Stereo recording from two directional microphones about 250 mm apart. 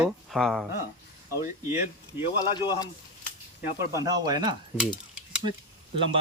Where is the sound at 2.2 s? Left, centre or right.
Centre.